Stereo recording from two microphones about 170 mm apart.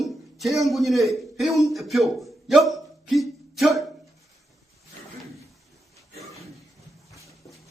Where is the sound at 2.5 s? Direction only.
Centre (ahead or behind).